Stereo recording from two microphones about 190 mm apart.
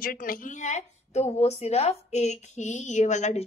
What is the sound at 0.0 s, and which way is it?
A woman's voice, 50° left (ahead or behind).